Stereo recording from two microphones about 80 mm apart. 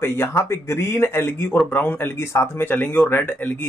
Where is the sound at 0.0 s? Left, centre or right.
Left.